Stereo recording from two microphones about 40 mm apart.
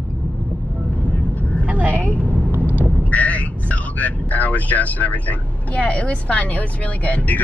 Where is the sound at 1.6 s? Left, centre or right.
Right.